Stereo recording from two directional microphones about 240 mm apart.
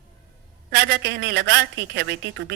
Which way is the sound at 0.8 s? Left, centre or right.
Right.